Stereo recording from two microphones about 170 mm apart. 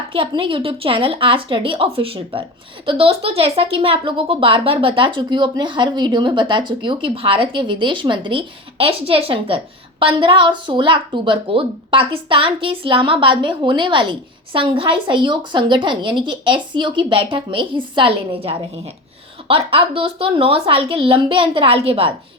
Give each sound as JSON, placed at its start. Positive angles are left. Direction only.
{"t": 0.1, "sound": "a woman's voice", "side_deg": -30}